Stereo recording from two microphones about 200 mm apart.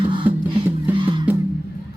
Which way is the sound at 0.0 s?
25° right (ahead or behind).